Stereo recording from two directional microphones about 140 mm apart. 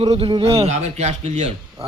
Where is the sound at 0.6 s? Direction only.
50° right (ahead or behind).